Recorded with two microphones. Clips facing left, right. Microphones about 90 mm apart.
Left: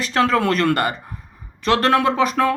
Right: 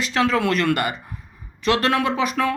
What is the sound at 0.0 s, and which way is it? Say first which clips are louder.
Speech: left 2 dB; 45° left (ahead or behind).